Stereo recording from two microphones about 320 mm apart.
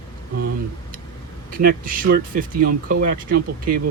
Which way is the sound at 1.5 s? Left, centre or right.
Right.